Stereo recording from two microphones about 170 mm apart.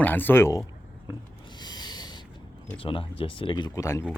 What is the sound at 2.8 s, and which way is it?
Speech, 30° left (ahead or behind).